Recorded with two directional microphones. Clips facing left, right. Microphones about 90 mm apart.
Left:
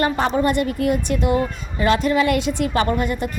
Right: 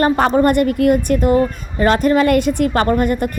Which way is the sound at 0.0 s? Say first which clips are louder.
Right 5 dB; 45° right (ahead or behind).